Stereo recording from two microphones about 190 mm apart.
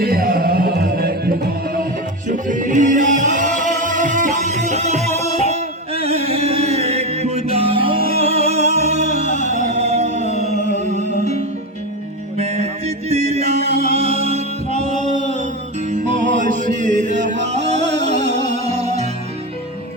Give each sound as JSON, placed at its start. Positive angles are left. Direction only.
{"t": 0.0, "sound": "music", "side_deg": -50}
{"t": 12.4, "sound": "mantra", "side_deg": -35}
{"t": 13.9, "sound": "music", "side_deg": -35}